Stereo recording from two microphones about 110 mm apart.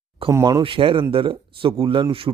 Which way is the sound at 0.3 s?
30° right (ahead or behind).